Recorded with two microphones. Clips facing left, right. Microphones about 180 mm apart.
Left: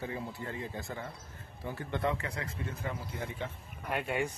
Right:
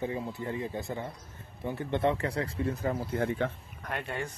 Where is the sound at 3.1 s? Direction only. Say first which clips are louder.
Right 9 dB; 60° right (ahead or behind).